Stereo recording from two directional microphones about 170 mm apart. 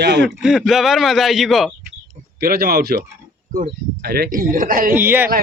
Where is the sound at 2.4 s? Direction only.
65° right (ahead or behind).